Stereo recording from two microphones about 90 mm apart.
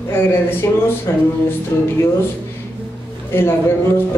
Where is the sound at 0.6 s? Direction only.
30° left (ahead or behind).